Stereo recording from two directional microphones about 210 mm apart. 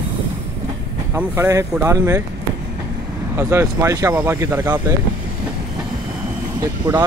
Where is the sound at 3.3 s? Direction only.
10° right (ahead or behind).